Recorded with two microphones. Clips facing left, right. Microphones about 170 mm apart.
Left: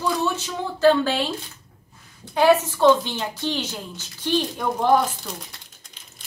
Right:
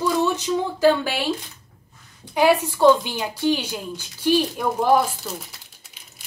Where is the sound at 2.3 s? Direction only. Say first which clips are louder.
Left 1 dB; 15° right (ahead or behind).